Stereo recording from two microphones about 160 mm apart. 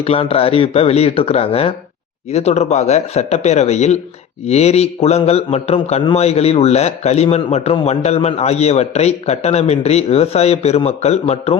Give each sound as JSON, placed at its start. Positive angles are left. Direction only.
{"t": 0.0, "sound": "a man's voice", "side_deg": 35}